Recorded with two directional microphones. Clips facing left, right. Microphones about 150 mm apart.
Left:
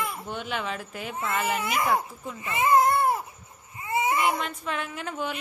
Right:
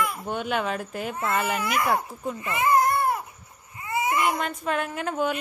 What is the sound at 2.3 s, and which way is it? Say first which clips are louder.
Baby cry: left 1 dB; 20° left (ahead or behind).